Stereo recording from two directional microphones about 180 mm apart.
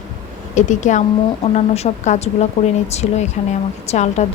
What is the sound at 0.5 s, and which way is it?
A woman's voice, 45° left (ahead or behind).